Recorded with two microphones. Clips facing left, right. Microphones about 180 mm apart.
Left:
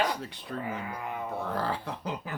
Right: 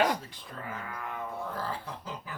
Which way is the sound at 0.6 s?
15° left (ahead or behind).